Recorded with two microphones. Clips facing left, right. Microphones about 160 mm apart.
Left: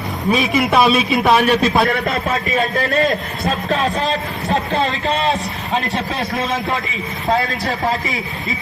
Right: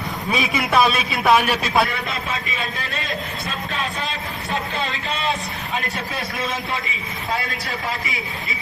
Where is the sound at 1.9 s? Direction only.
50° left (ahead or behind); by 5.8 s 30° left (ahead or behind).